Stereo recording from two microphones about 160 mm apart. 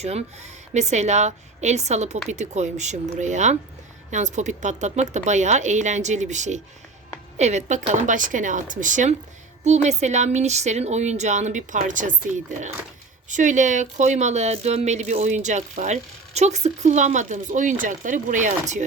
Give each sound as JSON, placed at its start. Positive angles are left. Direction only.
{"t": 0.0, "sound": "speech", "side_deg": -40}